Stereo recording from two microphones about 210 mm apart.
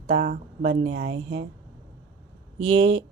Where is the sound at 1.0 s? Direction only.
55° right (ahead or behind).